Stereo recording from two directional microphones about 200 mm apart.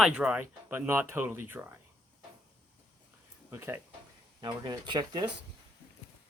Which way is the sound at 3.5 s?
10° right (ahead or behind).